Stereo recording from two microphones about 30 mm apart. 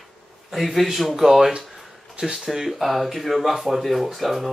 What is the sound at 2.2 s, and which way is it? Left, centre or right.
Speech, right.